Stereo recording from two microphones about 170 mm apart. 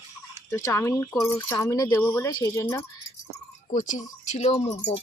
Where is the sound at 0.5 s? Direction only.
15° left (ahead or behind).